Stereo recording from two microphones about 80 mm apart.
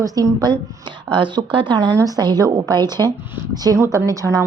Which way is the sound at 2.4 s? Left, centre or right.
Right.